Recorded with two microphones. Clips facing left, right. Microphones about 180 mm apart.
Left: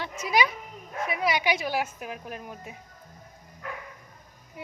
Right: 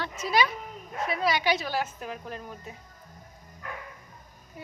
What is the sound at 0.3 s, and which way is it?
A woman's voice, 15° left (ahead or behind).